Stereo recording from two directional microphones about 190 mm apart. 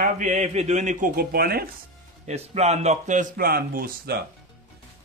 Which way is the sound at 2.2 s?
35° right (ahead or behind).